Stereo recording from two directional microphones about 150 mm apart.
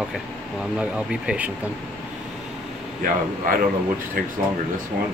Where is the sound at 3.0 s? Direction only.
70° right (ahead or behind).